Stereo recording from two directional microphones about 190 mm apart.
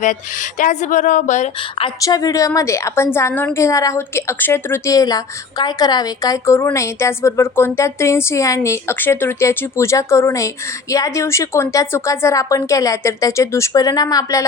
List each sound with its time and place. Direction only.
0.6 s speech: 40° left (ahead or behind)
1.8 s a woman's voice: 20° left (ahead or behind)